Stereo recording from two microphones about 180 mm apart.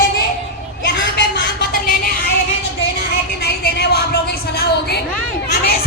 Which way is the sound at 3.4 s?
65° left (ahead or behind).